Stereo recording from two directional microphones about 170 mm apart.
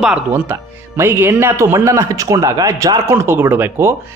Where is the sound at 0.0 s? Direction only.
10° right (ahead or behind).